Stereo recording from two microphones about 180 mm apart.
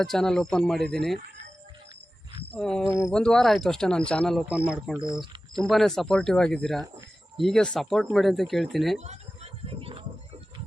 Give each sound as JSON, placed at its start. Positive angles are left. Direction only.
{"t": 0.0, "sound": "speech", "side_deg": 5}
{"t": 2.5, "sound": "speech", "side_deg": 5}
{"t": 9.0, "sound": "a sound", "side_deg": -35}